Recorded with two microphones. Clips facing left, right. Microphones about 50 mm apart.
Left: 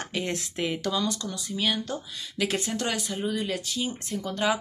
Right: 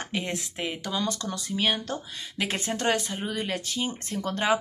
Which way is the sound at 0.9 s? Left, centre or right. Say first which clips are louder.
Left 1 dB; right.